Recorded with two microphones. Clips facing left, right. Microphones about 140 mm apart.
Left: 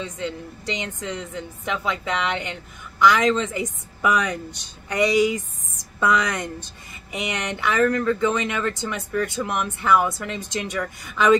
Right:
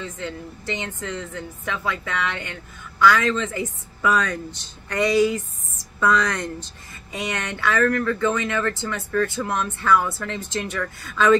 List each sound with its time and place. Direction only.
0.0 s speech: 20° left (ahead or behind)